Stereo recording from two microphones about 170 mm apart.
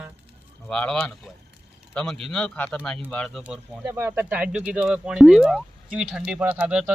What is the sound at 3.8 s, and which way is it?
Speech, 15° right (ahead or behind).